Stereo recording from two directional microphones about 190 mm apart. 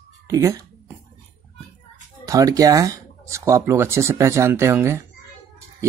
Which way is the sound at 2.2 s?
20° right (ahead or behind).